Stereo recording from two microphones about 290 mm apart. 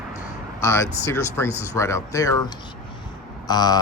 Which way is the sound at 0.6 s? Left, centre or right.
Centre.